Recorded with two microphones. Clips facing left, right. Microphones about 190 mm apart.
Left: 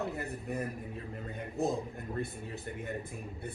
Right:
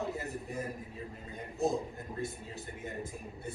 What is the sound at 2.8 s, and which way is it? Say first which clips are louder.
Speech: left 1 dB; 60° left (ahead or behind).